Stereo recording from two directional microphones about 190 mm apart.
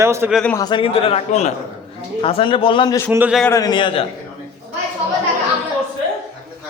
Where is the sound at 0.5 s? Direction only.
20° left (ahead or behind).